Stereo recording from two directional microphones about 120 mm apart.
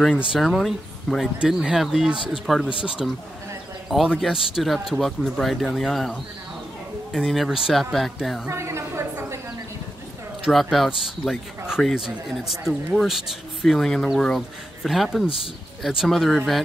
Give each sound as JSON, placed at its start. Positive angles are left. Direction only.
{"t": 0.3, "sound": "speech", "side_deg": 0}
{"t": 8.5, "sound": "a sound", "side_deg": -25}
{"t": 10.4, "sound": "speech", "side_deg": 0}